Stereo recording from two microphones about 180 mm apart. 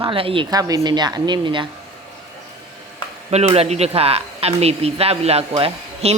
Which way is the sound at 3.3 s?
35° right (ahead or behind).